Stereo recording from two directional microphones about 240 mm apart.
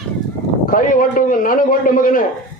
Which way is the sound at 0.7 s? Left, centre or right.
Left.